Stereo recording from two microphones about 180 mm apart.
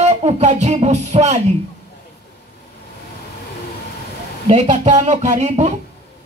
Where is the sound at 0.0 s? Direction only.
35° right (ahead or behind).